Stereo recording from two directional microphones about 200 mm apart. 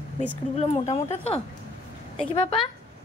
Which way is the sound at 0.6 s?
35° left (ahead or behind).